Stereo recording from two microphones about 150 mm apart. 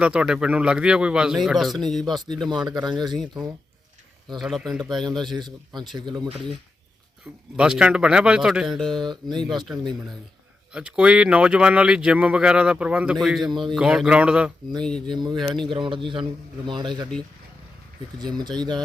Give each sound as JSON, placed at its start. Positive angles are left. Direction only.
{"t": 0.0, "sound": "speech", "side_deg": -5}
{"t": 2.6, "sound": "speech", "side_deg": -30}
{"t": 4.4, "sound": "speech", "side_deg": 0}
{"t": 5.4, "sound": "speech", "side_deg": -30}
{"t": 7.5, "sound": "speech", "side_deg": -5}
{"t": 9.0, "sound": "a man's voice", "side_deg": -30}
{"t": 10.7, "sound": "speech", "side_deg": -5}
{"t": 14.8, "sound": "speech", "side_deg": 5}
{"t": 15.1, "sound": "a man's voice", "side_deg": -30}
{"t": 18.2, "sound": "speech", "side_deg": -30}